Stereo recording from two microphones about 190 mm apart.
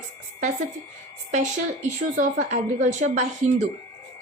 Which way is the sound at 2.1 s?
40° right (ahead or behind).